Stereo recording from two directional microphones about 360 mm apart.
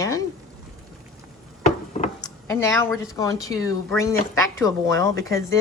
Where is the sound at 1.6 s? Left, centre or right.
Centre.